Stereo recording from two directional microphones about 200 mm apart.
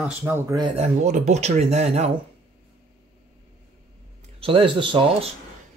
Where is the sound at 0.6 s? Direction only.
30° right (ahead or behind).